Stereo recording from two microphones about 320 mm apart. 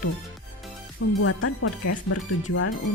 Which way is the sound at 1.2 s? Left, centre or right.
Left.